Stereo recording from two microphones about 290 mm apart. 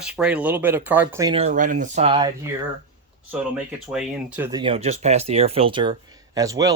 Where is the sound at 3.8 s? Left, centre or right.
Centre.